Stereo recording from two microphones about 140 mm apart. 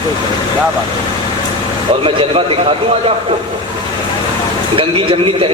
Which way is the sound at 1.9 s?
40° right (ahead or behind).